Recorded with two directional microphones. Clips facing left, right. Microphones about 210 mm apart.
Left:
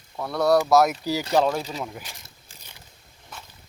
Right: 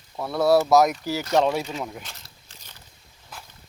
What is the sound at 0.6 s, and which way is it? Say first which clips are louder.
Speech: right 1 dB; centre (ahead or behind).